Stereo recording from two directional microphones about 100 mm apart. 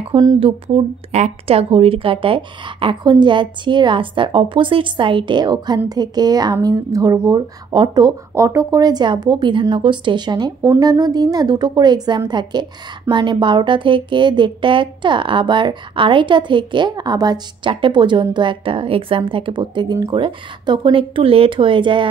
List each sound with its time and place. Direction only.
0.4 s speech: 80° right; by 8.2 s 45° right (ahead or behind)
8.4 s speech: 30° right (ahead or behind)
17.6 s speech: 60° right (ahead or behind)